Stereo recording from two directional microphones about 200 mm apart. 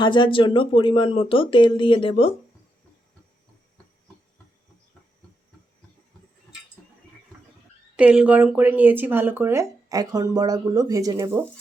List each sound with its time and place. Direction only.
0.0 s speech: 25° left (ahead or behind)
7.9 s speech: 5° right (ahead or behind)